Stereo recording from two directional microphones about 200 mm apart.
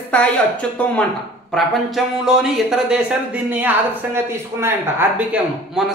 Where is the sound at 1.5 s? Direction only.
Centre (ahead or behind).